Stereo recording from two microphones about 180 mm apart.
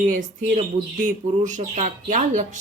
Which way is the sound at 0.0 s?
45° right (ahead or behind).